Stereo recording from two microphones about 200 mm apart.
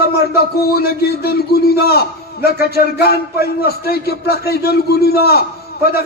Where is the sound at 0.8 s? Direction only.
50° left (ahead or behind).